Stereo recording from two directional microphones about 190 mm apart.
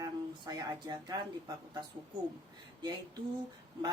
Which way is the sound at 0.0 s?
20° right (ahead or behind).